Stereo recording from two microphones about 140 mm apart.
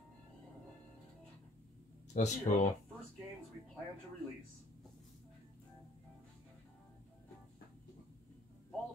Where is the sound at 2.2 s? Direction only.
65° left (ahead or behind).